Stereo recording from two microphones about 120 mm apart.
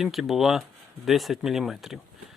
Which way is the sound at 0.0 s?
Centre (ahead or behind).